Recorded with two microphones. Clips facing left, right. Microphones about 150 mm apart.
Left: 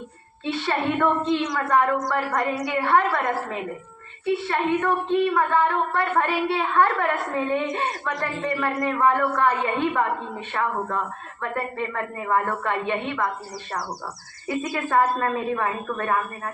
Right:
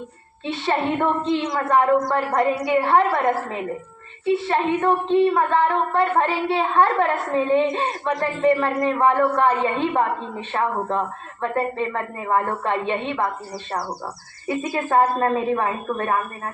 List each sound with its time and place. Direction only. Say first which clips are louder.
0.6 s speech: right 2 dB; 25° right (ahead or behind)
4.3 s speech: right 3 dB; 25° right (ahead or behind)
14.4 s speech: right 2 dB; 25° right (ahead or behind)